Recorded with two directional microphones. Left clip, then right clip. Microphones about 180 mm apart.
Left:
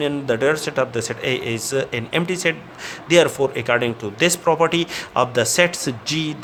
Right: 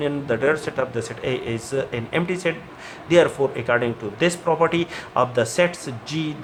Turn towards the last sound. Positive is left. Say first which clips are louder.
# left 5 dB
turn(degrees=55)  # may be behind; listen again after turning